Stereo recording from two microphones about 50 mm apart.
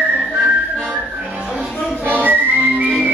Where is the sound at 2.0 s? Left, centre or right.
Right.